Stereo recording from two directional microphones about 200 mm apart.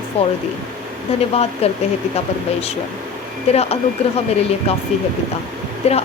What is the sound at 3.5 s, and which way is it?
Speech, 30° left (ahead or behind).